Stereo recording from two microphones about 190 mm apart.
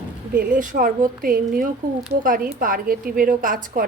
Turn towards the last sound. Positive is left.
turn(degrees=-45)  # may be behind; listen again after turning